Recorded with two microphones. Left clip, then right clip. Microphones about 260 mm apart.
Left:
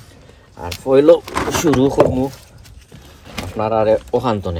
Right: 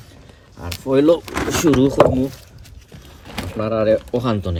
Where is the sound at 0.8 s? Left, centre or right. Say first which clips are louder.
Left 4 dB; centre.